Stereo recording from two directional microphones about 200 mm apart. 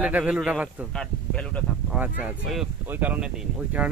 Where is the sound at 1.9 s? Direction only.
10° right (ahead or behind).